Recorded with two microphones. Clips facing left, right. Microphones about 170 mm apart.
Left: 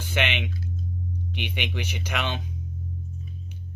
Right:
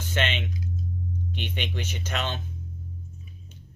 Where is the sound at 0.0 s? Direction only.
10° left (ahead or behind).